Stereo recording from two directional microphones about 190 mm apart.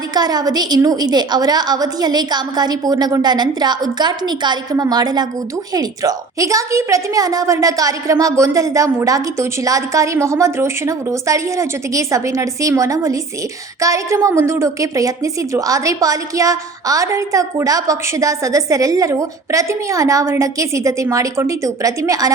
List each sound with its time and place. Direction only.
0.1 s a woman's voice: 20° right (ahead or behind)